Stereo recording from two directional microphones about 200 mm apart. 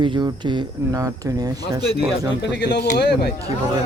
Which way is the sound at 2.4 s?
60° left (ahead or behind).